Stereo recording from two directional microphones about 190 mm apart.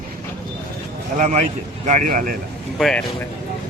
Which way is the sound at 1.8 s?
45° right (ahead or behind).